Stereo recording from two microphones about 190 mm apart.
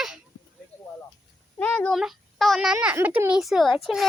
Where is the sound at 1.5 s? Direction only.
5° left (ahead or behind).